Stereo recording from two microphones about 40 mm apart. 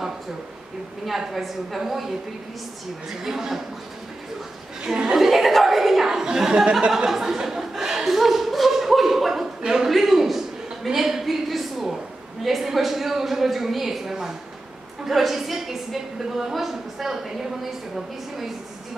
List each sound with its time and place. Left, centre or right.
1.0 s a woman's voice: centre
4.8 s a woman's voice: centre
5.2 s chuckle: centre
6.5 s speech: right
7.1 s chuckle: centre
9.6 s a sound: centre
9.8 s a sound: centre
15.0 s a woman's voice: centre